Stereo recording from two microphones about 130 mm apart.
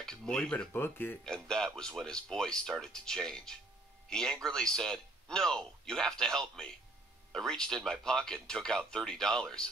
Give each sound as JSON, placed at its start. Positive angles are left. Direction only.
{"t": 0.0, "sound": "speech", "side_deg": 5}
{"t": 0.7, "sound": "speech", "side_deg": 15}
{"t": 1.2, "sound": "speech", "side_deg": 5}